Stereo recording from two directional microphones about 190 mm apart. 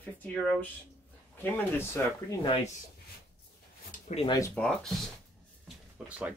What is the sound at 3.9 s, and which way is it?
Speech, 35° left (ahead or behind).